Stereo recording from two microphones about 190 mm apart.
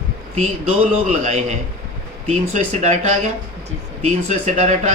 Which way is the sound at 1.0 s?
35° right (ahead or behind).